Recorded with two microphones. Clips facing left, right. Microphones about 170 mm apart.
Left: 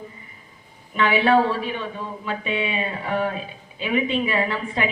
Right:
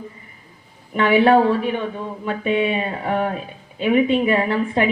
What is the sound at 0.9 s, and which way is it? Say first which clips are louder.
A woman's voice: right 4 dB; 50° right (ahead or behind).